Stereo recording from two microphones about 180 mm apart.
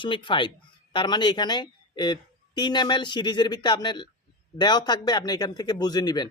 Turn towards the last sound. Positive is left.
turn(degrees=25)  # may be behind; listen again after turning